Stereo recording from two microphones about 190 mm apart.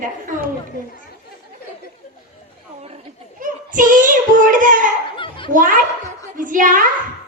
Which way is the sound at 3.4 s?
45° right (ahead or behind).